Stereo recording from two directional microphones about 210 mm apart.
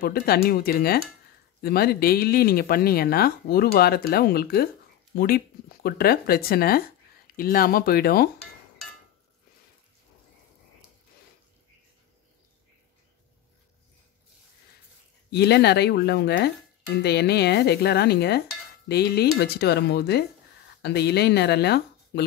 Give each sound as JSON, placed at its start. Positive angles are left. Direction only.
{"t": 0.0, "sound": "speech", "side_deg": 45}
{"t": 15.3, "sound": "speech", "side_deg": 50}